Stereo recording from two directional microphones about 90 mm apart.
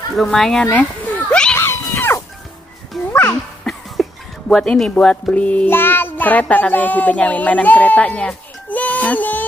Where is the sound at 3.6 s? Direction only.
5° left (ahead or behind).